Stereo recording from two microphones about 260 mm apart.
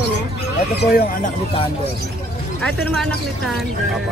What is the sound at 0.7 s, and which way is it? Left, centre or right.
Speech, left.